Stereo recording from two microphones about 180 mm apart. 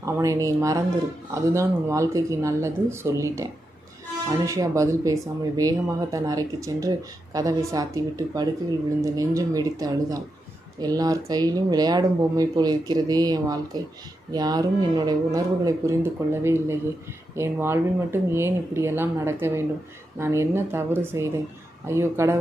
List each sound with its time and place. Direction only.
0.0 s speech: 15° right (ahead or behind)